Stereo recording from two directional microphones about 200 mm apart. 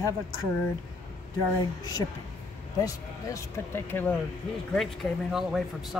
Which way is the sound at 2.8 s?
15° left (ahead or behind).